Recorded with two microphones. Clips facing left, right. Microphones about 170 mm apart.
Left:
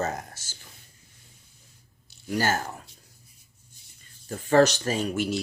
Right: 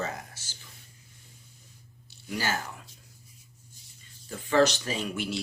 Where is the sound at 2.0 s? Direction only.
45° left (ahead or behind).